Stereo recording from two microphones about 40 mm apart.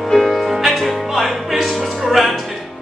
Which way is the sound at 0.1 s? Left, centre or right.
Centre.